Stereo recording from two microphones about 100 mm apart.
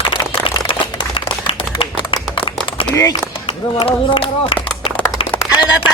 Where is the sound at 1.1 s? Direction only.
60° left (ahead or behind).